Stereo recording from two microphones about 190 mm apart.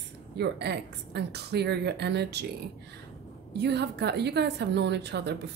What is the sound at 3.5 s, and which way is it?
Speech, 60° right (ahead or behind).